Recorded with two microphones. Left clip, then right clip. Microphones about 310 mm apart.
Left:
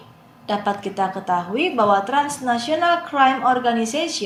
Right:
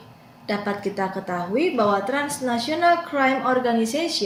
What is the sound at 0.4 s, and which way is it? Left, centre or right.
A woman's voice, centre.